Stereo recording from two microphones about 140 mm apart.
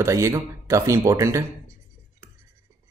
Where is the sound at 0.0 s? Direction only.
20° right (ahead or behind).